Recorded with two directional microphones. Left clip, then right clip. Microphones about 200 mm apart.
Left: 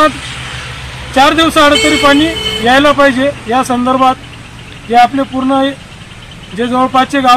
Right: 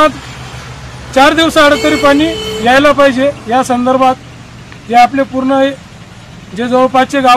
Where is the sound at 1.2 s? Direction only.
20° right (ahead or behind).